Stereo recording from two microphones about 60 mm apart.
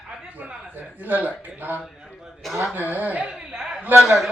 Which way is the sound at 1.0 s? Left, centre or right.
Right.